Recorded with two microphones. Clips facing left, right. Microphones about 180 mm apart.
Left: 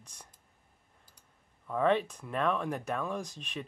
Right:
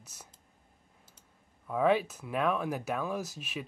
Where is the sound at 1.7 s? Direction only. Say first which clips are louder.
Right 1 dB; 5° right (ahead or behind).